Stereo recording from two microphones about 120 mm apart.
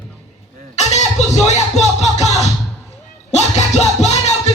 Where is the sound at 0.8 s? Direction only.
70° left (ahead or behind).